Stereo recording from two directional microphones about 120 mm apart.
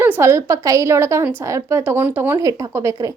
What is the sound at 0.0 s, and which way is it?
A woman's voice, 20° right (ahead or behind).